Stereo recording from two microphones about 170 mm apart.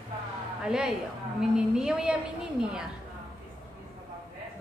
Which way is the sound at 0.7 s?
5° right (ahead or behind).